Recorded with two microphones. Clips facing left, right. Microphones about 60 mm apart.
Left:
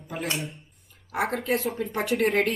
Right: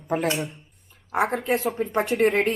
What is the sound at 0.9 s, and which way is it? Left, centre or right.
Speech, right.